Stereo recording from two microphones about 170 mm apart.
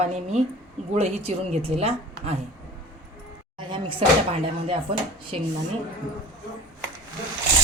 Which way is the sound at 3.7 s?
30° right (ahead or behind).